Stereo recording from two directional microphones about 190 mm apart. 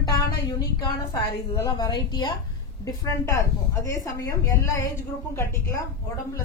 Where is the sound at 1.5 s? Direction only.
20° left (ahead or behind).